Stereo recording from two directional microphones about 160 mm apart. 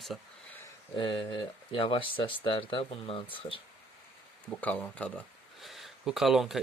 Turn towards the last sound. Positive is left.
turn(degrees=0)  # may be behind; listen again after turning